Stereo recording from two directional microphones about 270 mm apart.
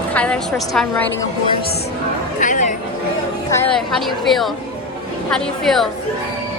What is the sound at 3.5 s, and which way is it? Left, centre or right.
Speech, centre.